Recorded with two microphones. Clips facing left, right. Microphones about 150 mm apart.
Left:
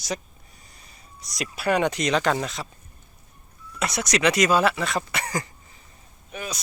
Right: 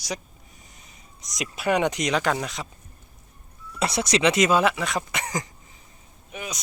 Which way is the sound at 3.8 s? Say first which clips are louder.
Right 1 dB; 30° right (ahead or behind).